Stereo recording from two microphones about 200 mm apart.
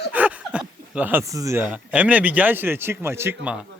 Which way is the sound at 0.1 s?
5° right (ahead or behind).